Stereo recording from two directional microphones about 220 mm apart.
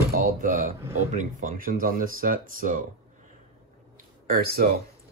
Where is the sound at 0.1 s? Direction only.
40° right (ahead or behind).